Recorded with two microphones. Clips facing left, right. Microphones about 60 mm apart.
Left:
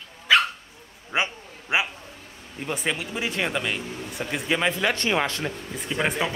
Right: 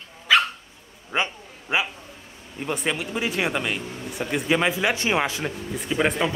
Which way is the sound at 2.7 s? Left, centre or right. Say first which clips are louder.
Right 2 dB; centre.